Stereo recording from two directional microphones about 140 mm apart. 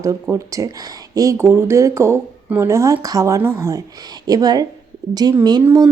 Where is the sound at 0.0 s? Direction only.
20° right (ahead or behind).